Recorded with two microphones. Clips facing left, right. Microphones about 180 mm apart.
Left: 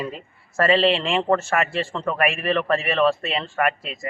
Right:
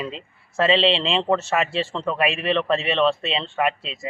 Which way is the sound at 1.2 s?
Centre (ahead or behind).